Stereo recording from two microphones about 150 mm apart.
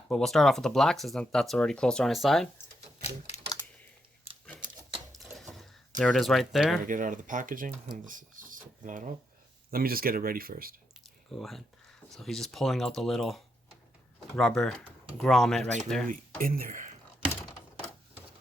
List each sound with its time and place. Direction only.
0.1 s speech: 5° left (ahead or behind)
3.0 s typewriter: 50° left (ahead or behind)
5.1 s a sound: centre (ahead or behind)
6.0 s speech: centre (ahead or behind)
6.8 s speech: 60° right (ahead or behind)
9.7 s speech: 80° right
11.3 s speech: centre (ahead or behind)
16.0 s speech: 65° right (ahead or behind)